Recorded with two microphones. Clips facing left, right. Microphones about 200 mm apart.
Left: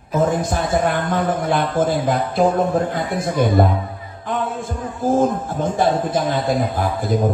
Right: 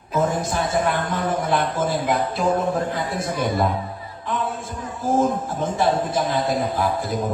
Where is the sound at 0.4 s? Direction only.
55° left (ahead or behind).